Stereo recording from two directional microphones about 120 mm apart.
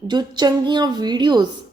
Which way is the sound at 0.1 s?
35° right (ahead or behind).